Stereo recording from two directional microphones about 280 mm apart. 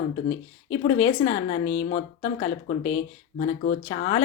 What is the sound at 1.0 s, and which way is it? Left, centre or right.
A woman's voice, left.